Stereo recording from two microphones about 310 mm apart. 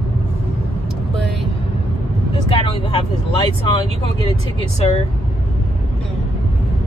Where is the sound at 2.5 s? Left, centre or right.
Centre.